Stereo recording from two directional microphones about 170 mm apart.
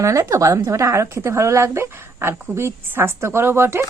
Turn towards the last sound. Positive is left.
turn(degrees=-15)  # may be behind; listen again after turning